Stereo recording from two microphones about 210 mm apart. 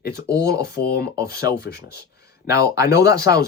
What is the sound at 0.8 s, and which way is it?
Speech, 50° left (ahead or behind).